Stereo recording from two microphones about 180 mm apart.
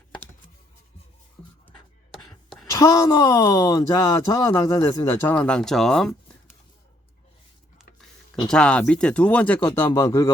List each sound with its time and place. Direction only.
2.1 s a sound: centre (ahead or behind)
2.6 s speech: 15° left (ahead or behind)
8.4 s speech: 5° left (ahead or behind)